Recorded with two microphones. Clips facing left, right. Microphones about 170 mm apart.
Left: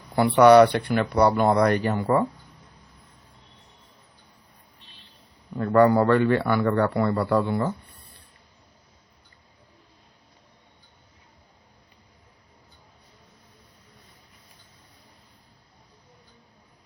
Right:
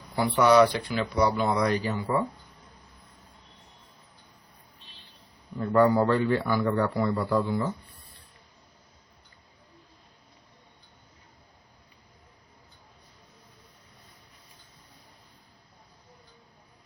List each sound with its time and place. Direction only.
0.2 s speech: 65° left (ahead or behind)
5.5 s a man's voice: 70° left (ahead or behind)